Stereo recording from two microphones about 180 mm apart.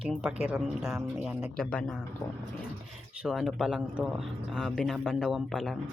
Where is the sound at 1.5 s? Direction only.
5° left (ahead or behind).